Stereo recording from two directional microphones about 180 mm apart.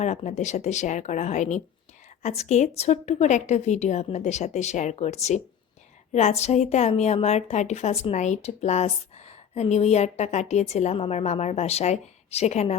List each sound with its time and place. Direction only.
0.0 s a woman's voice: 40° left (ahead or behind)